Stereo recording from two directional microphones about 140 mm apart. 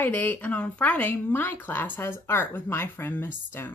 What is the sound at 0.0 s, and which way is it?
Speech, 15° left (ahead or behind).